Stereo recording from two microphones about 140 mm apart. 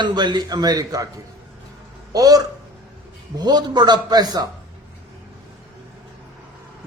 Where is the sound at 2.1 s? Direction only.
25° right (ahead or behind).